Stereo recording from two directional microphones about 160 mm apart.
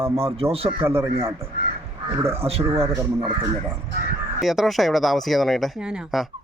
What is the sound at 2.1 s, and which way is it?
Turkey, 15° right (ahead or behind).